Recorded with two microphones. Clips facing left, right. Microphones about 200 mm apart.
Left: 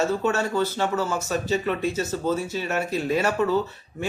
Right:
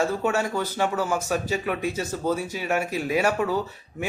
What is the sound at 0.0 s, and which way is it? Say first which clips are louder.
A man's voice: left 1 dB; 10° right (ahead or behind).